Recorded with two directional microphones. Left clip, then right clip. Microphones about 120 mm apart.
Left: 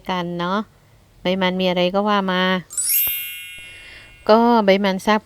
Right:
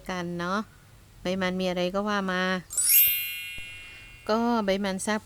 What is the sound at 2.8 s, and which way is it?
Jingle, centre (ahead or behind).